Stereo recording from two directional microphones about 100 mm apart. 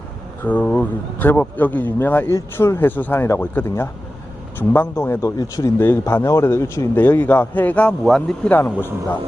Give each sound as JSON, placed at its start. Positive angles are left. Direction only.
{"t": 0.4, "sound": "speech", "side_deg": 15}
{"t": 5.8, "sound": "speech", "side_deg": 20}
{"t": 8.0, "sound": "speech", "side_deg": 5}
{"t": 8.4, "sound": "speech", "side_deg": 20}